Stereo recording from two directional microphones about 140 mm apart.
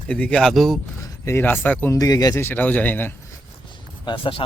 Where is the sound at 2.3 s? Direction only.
15° left (ahead or behind).